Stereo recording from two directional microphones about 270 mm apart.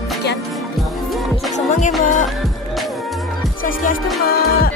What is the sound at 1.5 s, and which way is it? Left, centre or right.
Music, left.